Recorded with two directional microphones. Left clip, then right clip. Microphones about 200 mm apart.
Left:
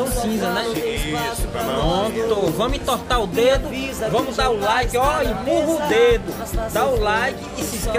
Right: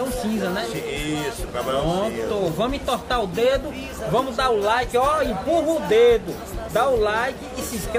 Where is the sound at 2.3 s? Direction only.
35° left (ahead or behind).